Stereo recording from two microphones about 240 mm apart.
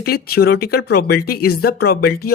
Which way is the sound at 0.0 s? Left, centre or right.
Left.